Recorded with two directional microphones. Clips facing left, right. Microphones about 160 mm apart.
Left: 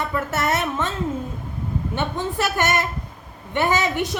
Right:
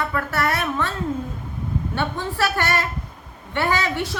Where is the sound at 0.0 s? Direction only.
20° left (ahead or behind).